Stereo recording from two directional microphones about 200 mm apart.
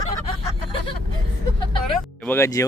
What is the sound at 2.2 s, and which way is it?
Speech, 15° left (ahead or behind).